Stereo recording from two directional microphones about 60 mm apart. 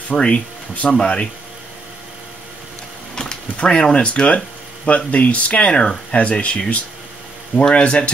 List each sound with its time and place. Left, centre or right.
0.1 s speech: centre
3.2 s a sound: centre
3.8 s speech: centre